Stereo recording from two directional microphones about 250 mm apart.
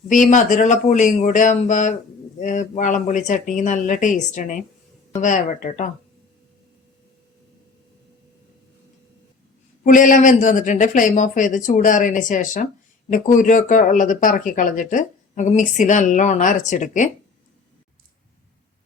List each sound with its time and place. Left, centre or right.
0.1 s speech: left
9.8 s speech: left